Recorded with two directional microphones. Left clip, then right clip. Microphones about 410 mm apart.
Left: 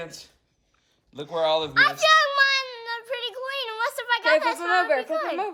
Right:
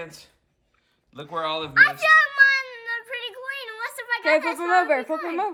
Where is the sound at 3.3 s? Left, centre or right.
Centre.